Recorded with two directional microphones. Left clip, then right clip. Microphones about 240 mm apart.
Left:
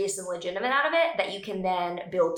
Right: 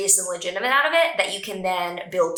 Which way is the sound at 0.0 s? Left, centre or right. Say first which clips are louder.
Right 5 dB; centre.